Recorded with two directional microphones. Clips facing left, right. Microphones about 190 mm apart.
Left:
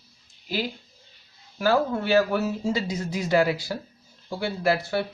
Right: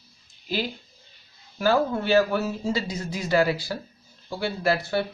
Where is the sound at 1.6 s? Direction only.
5° left (ahead or behind).